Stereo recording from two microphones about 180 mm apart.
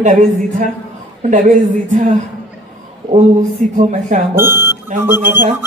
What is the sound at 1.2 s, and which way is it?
Speech, 45° right (ahead or behind).